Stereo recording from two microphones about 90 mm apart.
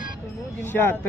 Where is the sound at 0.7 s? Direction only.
25° left (ahead or behind).